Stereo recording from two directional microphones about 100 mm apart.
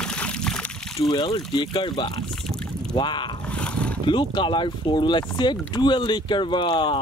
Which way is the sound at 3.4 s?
10° left (ahead or behind).